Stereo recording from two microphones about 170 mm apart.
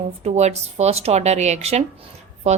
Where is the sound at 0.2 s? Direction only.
40° right (ahead or behind).